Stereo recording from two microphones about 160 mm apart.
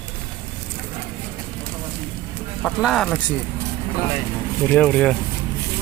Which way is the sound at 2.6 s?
5° left (ahead or behind).